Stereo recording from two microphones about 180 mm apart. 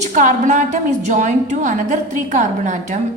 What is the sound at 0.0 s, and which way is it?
A woman's voice, 45° right (ahead or behind).